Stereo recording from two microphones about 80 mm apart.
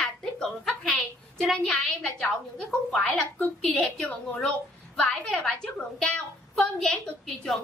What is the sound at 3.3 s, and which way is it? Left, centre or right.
A woman's voice, centre.